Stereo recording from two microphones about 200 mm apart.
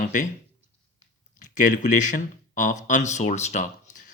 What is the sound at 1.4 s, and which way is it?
Speech, 40° left (ahead or behind).